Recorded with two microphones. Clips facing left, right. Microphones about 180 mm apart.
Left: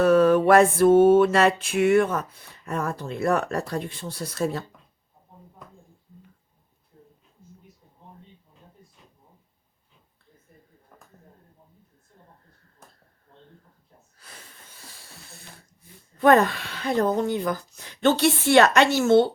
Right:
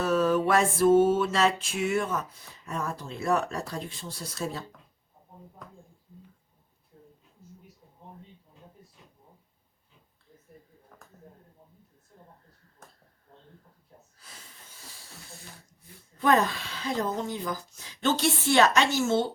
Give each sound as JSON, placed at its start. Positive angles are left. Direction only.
{"t": 0.0, "sound": "mantra", "side_deg": 60}
{"t": 16.1, "sound": "mantra", "side_deg": 60}